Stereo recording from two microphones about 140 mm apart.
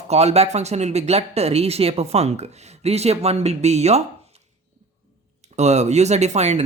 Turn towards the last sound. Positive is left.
turn(degrees=-55)  # may be behind; listen again after turning